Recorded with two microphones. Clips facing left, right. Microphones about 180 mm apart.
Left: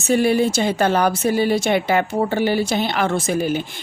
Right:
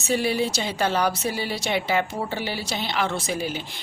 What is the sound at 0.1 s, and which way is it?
A woman's voice, 55° left (ahead or behind).